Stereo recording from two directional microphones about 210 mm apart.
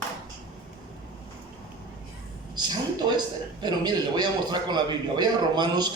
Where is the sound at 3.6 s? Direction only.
20° right (ahead or behind).